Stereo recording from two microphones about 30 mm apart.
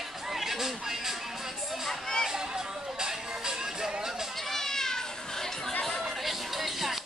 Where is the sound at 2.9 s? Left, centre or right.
Centre.